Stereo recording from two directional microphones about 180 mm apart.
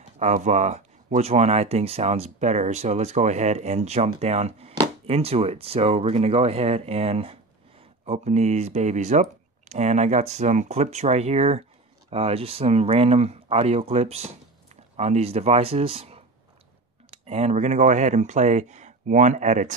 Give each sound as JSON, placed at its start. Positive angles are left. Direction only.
{"t": 0.2, "sound": "speech", "side_deg": -40}
{"t": 17.3, "sound": "speech", "side_deg": -40}